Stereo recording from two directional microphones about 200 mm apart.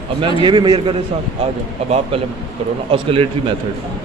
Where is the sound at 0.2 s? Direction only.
25° right (ahead or behind).